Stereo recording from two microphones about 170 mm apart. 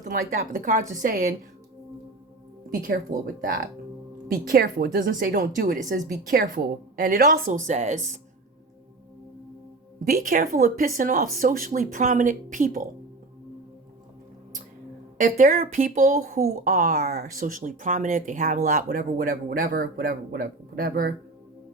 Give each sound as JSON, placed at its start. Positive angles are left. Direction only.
{"t": 0.0, "sound": "speech", "side_deg": -50}
{"t": 2.6, "sound": "a woman's voice", "side_deg": -55}
{"t": 10.0, "sound": "speech", "side_deg": -55}
{"t": 15.2, "sound": "speech", "side_deg": -50}